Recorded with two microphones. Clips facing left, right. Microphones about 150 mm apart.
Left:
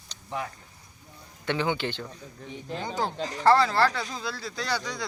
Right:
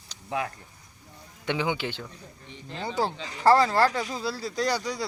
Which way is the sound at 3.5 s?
40° right (ahead or behind).